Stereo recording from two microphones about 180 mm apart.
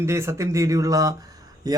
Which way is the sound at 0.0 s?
15° right (ahead or behind).